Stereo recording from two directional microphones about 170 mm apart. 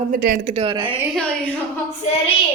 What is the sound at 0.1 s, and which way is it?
Speech, 60° right (ahead or behind).